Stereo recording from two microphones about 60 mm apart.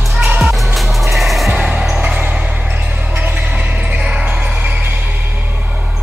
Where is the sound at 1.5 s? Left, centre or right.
Centre.